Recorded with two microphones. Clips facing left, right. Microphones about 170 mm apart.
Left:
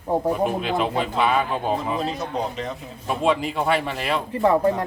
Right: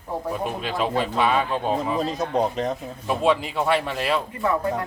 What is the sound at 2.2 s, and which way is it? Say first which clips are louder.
Speech: right 4 dB; 45° right (ahead or behind).